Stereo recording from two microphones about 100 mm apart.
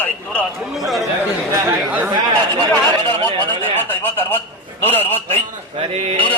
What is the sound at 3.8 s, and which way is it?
Speech, 20° left (ahead or behind).